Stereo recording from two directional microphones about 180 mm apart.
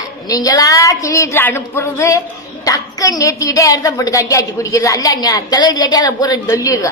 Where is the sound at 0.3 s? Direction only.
20° left (ahead or behind).